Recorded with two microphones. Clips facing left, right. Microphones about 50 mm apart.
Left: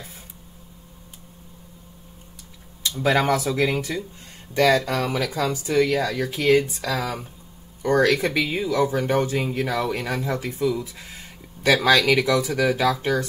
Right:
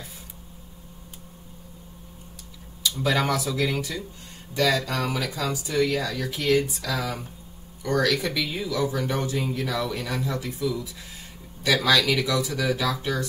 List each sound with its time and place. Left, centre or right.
2.8 s speech: left